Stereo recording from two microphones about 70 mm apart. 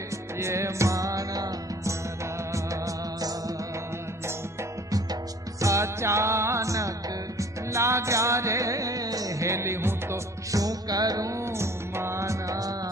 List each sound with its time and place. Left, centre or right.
0.3 s music: right
5.5 s music: right
10.6 s music: right
11.5 s music: right